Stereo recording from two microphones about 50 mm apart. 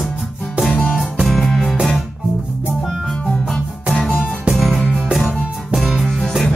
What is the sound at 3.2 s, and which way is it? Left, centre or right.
Music, centre.